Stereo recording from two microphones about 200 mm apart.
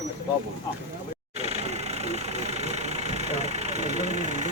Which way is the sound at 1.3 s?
35° right (ahead or behind).